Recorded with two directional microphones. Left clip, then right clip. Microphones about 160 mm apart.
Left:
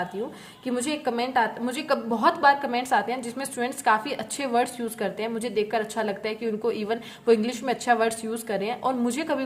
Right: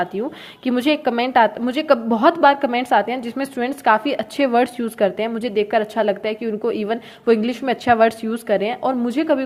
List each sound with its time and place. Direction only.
0.6 s a woman's voice: 50° right (ahead or behind); by 9.4 s 30° right (ahead or behind)